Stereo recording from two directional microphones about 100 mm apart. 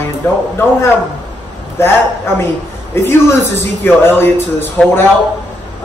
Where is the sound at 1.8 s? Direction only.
25° left (ahead or behind).